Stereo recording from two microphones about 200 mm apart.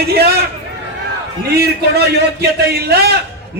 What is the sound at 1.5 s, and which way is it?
A man's voice, 55° right (ahead or behind).